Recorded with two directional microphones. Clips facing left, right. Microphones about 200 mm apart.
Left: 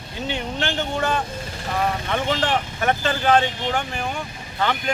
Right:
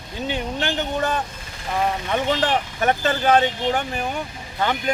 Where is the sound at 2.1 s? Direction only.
15° right (ahead or behind).